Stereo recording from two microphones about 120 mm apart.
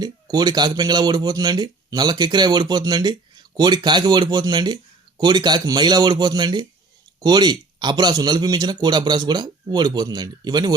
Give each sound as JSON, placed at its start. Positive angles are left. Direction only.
{"t": 0.0, "sound": "speech", "side_deg": -35}